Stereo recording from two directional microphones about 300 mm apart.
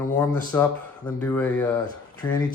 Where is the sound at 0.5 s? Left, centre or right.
Centre.